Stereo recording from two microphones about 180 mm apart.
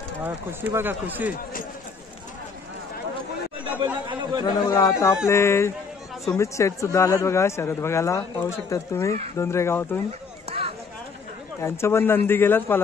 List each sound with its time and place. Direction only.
0.2 s speech: 10° right (ahead or behind)
3.6 s chatter: 10° right (ahead or behind)
4.5 s speech: 20° left (ahead or behind)
11.6 s speech: 15° left (ahead or behind)